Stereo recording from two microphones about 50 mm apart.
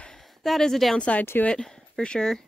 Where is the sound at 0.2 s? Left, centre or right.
Centre.